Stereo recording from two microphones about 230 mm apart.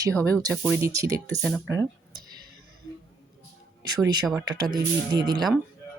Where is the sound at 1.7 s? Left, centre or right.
Centre.